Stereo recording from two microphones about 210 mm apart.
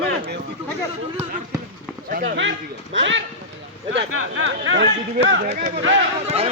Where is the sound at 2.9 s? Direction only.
60° right (ahead or behind).